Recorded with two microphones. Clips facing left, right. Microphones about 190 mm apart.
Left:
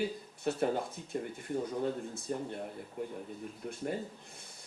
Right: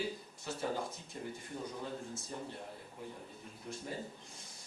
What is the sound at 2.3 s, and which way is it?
Speech, 60° left (ahead or behind).